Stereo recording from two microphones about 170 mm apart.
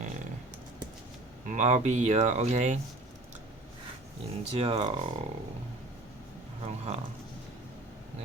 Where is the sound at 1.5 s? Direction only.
45° right (ahead or behind).